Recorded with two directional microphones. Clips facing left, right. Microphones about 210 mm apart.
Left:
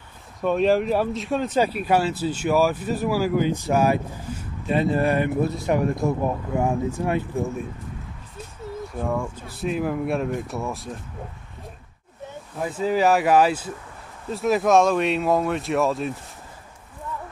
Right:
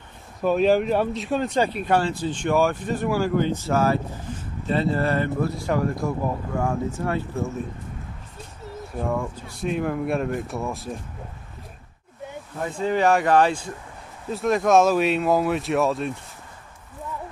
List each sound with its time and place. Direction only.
0.4 s speech: centre (ahead or behind); by 7.4 s 15° left (ahead or behind)
9.0 s speech: centre (ahead or behind)
12.5 s speech: 5° left (ahead or behind)